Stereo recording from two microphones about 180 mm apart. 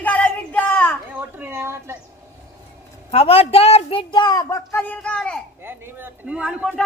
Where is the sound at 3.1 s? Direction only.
35° left (ahead or behind); by 5.4 s 5° left (ahead or behind).